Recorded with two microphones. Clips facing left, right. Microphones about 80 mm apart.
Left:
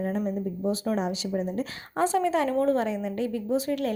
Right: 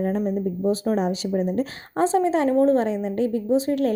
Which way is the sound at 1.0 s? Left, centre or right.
Right.